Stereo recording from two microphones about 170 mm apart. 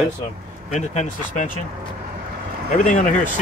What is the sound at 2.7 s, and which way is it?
Speech, 50° left (ahead or behind).